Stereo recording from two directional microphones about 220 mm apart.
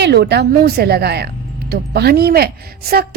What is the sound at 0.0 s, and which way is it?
A woman's voice, 50° right (ahead or behind).